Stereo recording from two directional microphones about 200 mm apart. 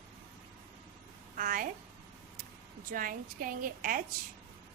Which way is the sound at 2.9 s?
45° right (ahead or behind).